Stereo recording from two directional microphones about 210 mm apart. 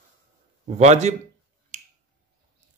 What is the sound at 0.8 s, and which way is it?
Speech, 35° right (ahead or behind).